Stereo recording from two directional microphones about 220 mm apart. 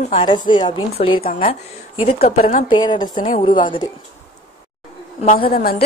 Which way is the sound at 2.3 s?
40° left (ahead or behind).